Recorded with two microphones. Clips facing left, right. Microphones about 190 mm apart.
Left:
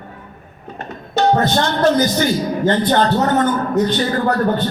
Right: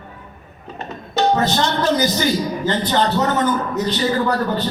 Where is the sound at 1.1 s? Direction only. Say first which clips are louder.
Left 2 dB; 55° left (ahead or behind).